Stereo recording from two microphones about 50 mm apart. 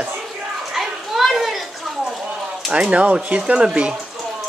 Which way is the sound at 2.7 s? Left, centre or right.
Right.